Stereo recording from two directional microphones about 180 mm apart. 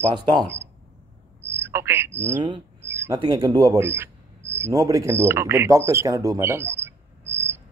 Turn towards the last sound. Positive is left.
turn(degrees=-15)  # may be behind; listen again after turning